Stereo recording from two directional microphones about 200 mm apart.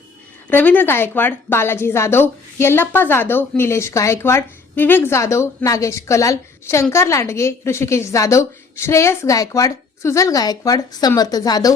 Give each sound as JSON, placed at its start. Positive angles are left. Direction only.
{"t": 0.5, "sound": "a woman's voice", "side_deg": 10}